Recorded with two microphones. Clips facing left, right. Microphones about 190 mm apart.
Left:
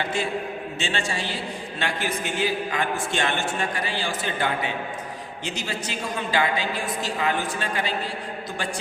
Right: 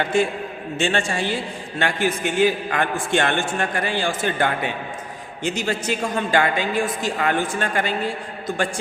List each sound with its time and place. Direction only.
0.0 s a man's voice: 50° right (ahead or behind)